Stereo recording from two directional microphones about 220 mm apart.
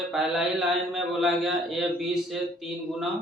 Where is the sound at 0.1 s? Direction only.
Centre (ahead or behind).